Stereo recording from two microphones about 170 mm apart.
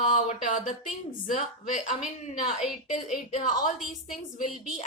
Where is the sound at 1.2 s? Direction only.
50° left (ahead or behind).